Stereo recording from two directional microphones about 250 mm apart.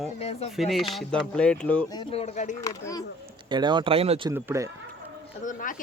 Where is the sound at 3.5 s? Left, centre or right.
Centre.